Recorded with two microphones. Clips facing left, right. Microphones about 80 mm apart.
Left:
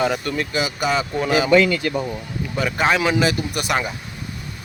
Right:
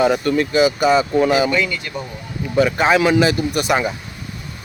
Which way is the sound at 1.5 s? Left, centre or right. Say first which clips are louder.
Left 5 dB; left.